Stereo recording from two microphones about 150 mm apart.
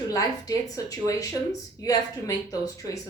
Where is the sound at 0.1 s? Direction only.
25° left (ahead or behind).